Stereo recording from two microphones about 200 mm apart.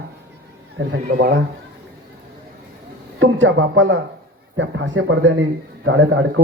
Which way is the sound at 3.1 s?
70° right (ahead or behind).